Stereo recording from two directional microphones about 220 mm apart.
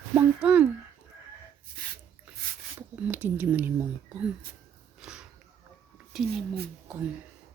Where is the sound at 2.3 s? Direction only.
5° right (ahead or behind).